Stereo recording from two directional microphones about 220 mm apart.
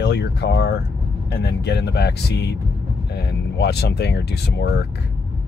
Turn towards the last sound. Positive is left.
turn(degrees=50)  # may be behind; listen again after turning